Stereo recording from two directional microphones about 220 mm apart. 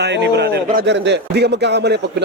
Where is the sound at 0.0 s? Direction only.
50° right (ahead or behind).